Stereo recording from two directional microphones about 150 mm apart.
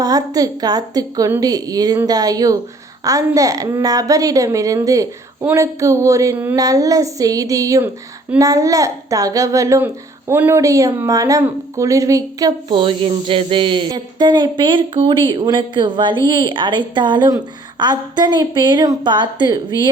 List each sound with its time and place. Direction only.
0.0 s a child's voice: 25° right (ahead or behind)
6.6 s a child's voice: 25° right (ahead or behind)